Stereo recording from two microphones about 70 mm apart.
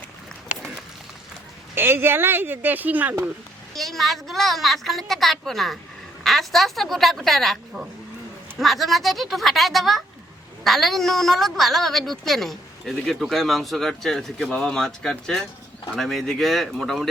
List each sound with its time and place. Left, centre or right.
1.7 s speech: right
3.8 s a woman's voice: centre